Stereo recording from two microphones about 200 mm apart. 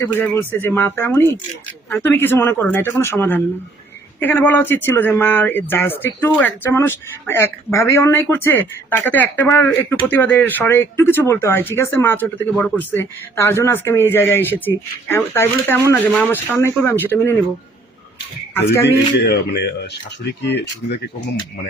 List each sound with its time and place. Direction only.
0.0 s speech: 10° left (ahead or behind)
18.5 s speech: 10° left (ahead or behind)
19.2 s speech: 55° left (ahead or behind)